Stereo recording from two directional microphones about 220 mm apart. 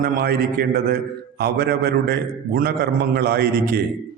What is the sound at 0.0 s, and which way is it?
A man's voice, 45° right (ahead or behind).